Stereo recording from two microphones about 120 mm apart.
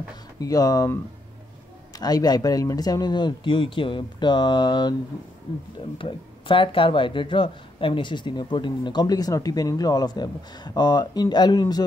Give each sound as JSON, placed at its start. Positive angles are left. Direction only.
{"t": 0.4, "sound": "speech", "side_deg": 30}
{"t": 2.0, "sound": "speech", "side_deg": 35}